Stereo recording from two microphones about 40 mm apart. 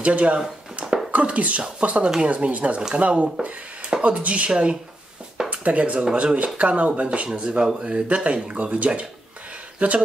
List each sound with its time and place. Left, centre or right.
0.0 s speech: right
0.8 s a sound: right
1.1 s speech: right